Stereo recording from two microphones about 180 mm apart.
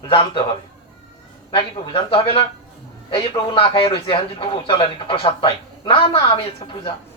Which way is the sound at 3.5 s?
30° left (ahead or behind).